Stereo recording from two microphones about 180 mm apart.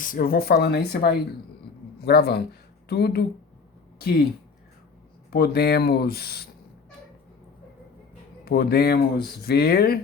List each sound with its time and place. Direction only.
0.0 s speech: 50° left (ahead or behind)
5.3 s speech: 60° left (ahead or behind)
8.4 s speech: 55° left (ahead or behind)